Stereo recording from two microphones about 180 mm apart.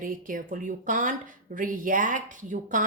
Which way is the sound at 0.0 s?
50° right (ahead or behind).